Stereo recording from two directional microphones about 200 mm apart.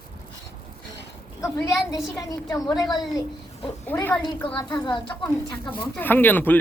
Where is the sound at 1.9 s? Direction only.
15° left (ahead or behind).